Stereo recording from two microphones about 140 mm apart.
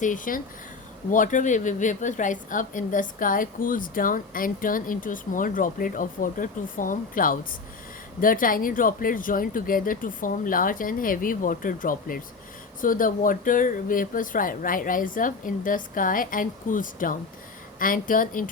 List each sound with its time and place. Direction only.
0.0 s a woman's voice: 75° left (ahead or behind)